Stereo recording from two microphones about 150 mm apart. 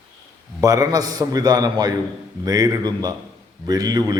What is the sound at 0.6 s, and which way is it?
A man's voice, 25° right (ahead or behind).